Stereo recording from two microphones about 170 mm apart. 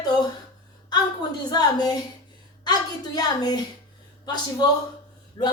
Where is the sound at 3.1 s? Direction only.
25° left (ahead or behind).